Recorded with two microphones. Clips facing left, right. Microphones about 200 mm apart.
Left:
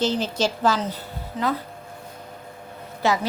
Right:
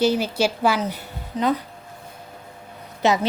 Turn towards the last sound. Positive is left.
turn(degrees=-20)  # may be behind; listen again after turning